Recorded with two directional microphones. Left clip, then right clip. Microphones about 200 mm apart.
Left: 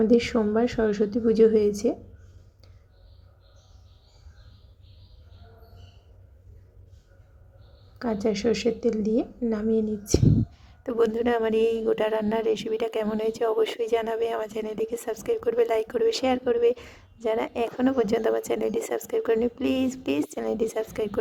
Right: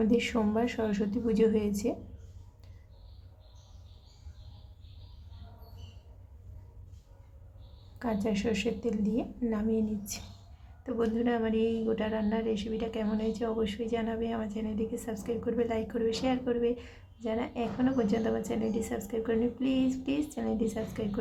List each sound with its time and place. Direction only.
0.0 s a woman's voice: 15° left (ahead or behind)
7.9 s a woman's voice: 15° left (ahead or behind)
10.8 s speech: 40° left (ahead or behind)